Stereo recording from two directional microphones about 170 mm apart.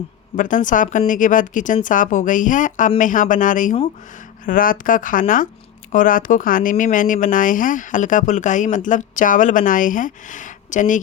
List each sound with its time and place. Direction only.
0.3 s speech: 50° left (ahead or behind)